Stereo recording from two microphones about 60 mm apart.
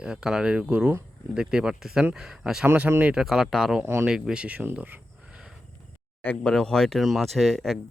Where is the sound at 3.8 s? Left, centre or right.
Right.